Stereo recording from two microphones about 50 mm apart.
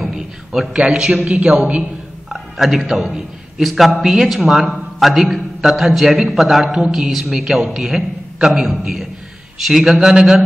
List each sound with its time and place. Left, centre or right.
0.1 s a man's voice: centre
2.3 s a man's voice: centre
3.1 s a man's voice: centre
3.6 s a man's voice: centre